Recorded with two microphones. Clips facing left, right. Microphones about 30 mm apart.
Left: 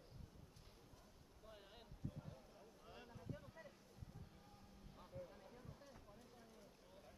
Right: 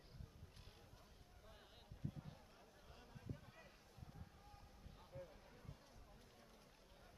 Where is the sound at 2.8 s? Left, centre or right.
Centre.